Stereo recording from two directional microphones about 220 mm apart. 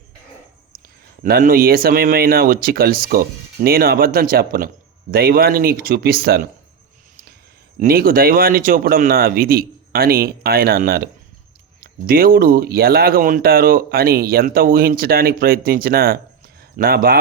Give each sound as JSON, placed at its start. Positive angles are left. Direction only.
{"t": 1.2, "sound": "a man's voice", "side_deg": -40}
{"t": 7.8, "sound": "speech", "side_deg": -40}